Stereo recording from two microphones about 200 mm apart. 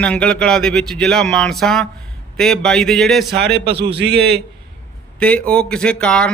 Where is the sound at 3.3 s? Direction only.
55° right (ahead or behind).